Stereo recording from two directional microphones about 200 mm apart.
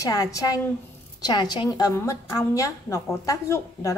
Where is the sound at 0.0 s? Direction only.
15° left (ahead or behind).